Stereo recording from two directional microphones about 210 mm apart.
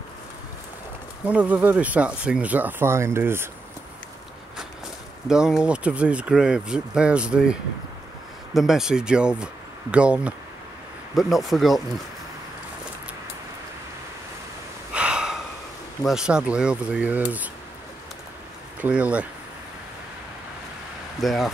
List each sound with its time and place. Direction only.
1.2 s speech: 5° right (ahead or behind)
5.3 s speech: 5° right (ahead or behind)
8.5 s speech: centre (ahead or behind)
15.0 s gasp: 5° right (ahead or behind)
16.0 s speech: centre (ahead or behind)
18.8 s speech: 5° right (ahead or behind)
21.2 s speech: centre (ahead or behind)